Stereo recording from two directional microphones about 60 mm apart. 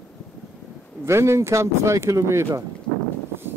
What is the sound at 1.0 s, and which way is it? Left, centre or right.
Speech, right.